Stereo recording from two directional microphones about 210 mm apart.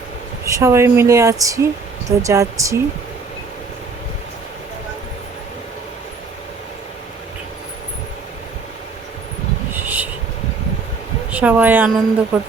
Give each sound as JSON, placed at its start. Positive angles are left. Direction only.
{"t": 0.4, "sound": "a woman's voice", "side_deg": -15}
{"t": 11.3, "sound": "a woman's voice", "side_deg": -5}